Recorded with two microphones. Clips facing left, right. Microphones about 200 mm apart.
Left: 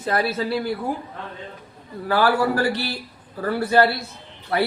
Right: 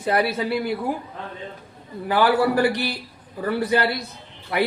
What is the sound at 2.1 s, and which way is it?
A man's voice, 15° right (ahead or behind).